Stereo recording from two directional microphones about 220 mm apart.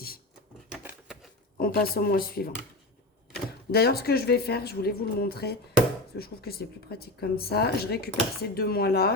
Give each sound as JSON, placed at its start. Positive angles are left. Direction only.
{"t": 0.7, "sound": "a sound", "side_deg": -5}
{"t": 1.5, "sound": "speech", "side_deg": 40}
{"t": 3.7, "sound": "speech", "side_deg": 45}